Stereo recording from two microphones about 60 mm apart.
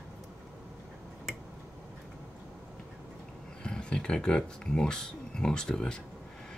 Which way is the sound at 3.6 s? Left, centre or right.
Centre.